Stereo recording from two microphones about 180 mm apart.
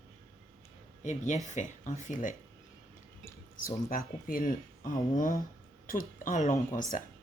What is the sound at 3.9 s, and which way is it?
Speech, 50° left (ahead or behind).